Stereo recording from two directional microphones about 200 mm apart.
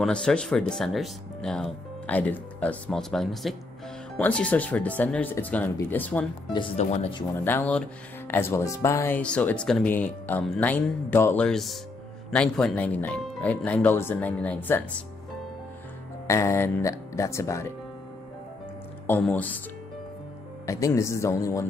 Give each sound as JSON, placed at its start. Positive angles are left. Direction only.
{"t": 0.0, "sound": "speech", "side_deg": 5}
{"t": 6.8, "sound": "speech", "side_deg": 30}
{"t": 7.3, "sound": "speech", "side_deg": 10}
{"t": 16.3, "sound": "speech", "side_deg": 15}
{"t": 19.0, "sound": "speech", "side_deg": 10}
{"t": 20.6, "sound": "speech", "side_deg": 15}